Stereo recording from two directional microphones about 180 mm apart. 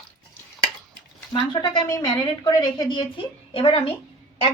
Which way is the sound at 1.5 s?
25° left (ahead or behind).